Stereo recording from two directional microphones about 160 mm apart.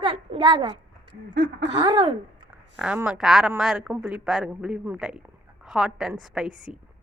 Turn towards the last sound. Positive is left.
turn(degrees=-5)  # may be behind; listen again after turning